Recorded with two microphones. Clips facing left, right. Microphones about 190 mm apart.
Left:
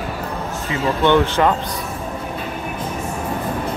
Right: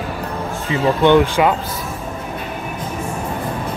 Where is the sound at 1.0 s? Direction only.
15° right (ahead or behind).